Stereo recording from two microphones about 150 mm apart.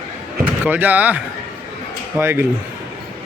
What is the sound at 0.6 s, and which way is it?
A man's voice, 10° right (ahead or behind).